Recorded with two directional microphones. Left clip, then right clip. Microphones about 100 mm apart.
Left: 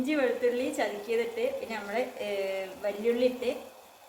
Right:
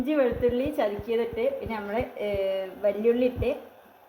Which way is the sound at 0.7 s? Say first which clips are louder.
Right 3 dB; 45° right (ahead or behind).